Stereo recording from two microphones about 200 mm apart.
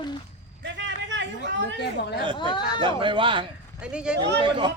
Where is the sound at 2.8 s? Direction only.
25° right (ahead or behind).